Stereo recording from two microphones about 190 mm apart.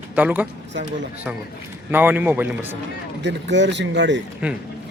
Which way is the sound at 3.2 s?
65° right (ahead or behind).